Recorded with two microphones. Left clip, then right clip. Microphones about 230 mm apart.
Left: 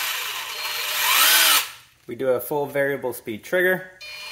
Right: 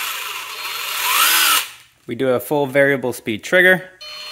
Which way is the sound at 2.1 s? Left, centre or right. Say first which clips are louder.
Right 4 dB; right.